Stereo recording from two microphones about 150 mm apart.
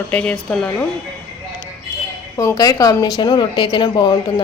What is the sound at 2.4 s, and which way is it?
A woman's voice, 20° left (ahead or behind).